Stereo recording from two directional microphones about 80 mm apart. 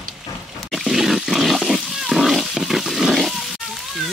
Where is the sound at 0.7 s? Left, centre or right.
Centre.